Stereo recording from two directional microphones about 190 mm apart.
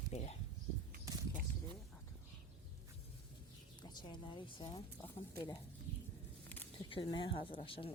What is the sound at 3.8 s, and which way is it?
A woman's voice, 25° left (ahead or behind).